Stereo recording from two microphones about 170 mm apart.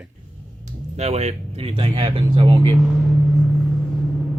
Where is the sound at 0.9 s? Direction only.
40° right (ahead or behind).